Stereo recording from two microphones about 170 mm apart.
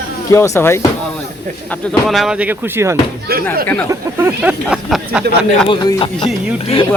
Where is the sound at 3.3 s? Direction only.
65° right (ahead or behind).